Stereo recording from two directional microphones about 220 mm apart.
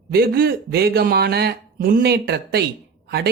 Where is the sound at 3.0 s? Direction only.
45° right (ahead or behind).